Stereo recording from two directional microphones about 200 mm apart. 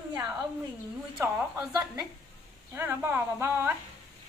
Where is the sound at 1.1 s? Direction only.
10° right (ahead or behind).